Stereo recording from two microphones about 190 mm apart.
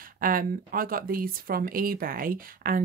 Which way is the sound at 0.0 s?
50° right (ahead or behind).